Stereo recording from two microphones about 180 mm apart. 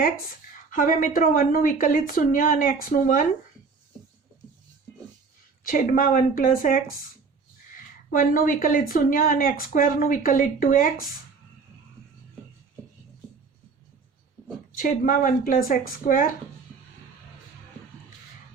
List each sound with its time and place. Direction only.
0.7 s speech: 50° left (ahead or behind)
5.6 s speech: 50° left (ahead or behind)
8.1 s speech: 50° left (ahead or behind)
14.8 s speech: 50° left (ahead or behind)